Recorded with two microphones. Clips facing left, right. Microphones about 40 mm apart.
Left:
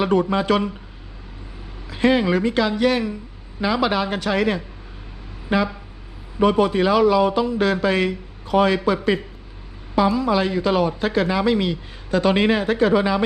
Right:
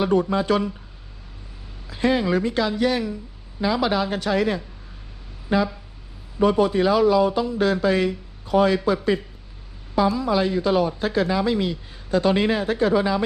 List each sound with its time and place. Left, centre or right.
0.0 s a man's voice: left
1.9 s a man's voice: left
6.7 s a man's voice: left